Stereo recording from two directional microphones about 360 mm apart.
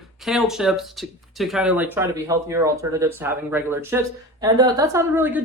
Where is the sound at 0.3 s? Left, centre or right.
Centre.